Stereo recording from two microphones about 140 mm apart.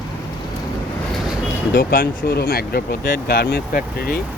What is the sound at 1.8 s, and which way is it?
Speech, 90° left.